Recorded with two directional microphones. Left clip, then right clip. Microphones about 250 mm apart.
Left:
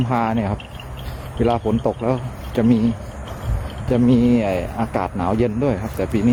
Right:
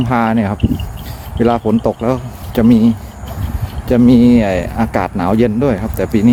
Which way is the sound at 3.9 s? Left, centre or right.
Right.